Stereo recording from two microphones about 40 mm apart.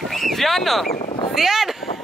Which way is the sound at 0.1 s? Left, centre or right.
Centre.